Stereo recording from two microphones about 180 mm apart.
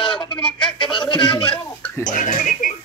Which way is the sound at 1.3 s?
10° left (ahead or behind).